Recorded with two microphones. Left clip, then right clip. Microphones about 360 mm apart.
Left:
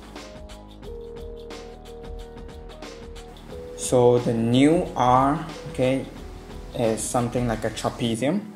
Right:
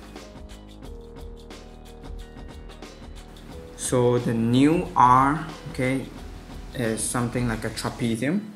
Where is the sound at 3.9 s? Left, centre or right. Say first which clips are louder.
Left 4 dB; left.